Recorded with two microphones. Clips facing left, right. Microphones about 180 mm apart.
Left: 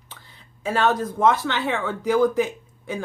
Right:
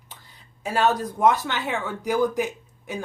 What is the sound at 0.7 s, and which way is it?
A woman's voice, 15° right (ahead or behind).